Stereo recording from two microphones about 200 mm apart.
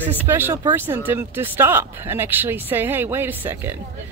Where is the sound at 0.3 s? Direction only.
10° right (ahead or behind).